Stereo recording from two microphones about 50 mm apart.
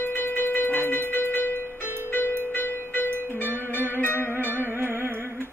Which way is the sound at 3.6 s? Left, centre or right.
Right.